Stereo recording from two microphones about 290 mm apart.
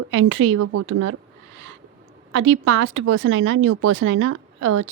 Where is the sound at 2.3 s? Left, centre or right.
Right.